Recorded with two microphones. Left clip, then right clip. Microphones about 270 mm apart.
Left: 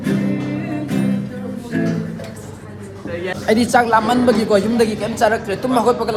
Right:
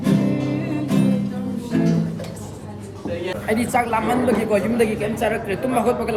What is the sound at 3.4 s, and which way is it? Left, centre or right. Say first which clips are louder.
A man's voice: left 7 dB; centre.